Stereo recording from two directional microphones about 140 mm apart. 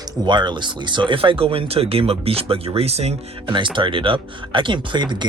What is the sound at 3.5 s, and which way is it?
Speech, 35° right (ahead or behind).